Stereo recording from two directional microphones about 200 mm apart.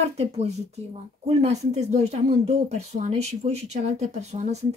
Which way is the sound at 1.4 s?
35° right (ahead or behind).